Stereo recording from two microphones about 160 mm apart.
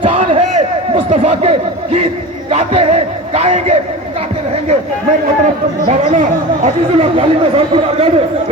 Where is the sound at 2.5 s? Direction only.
40° right (ahead or behind).